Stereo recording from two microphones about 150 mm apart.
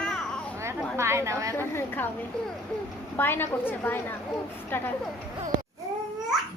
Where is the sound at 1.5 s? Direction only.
15° left (ahead or behind).